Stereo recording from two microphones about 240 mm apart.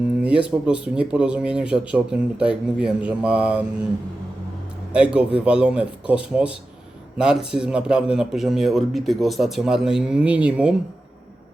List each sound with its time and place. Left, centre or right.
0.0 s a man's voice: centre
4.9 s a man's voice: centre